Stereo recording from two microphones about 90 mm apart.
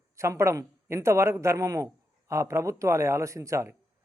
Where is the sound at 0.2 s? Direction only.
30° right (ahead or behind).